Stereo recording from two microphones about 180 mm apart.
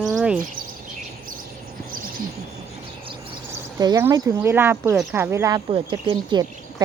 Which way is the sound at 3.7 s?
20° right (ahead or behind).